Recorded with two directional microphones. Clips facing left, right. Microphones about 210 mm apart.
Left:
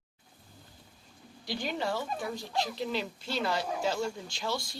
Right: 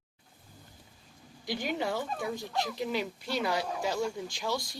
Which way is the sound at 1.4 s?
20° right (ahead or behind).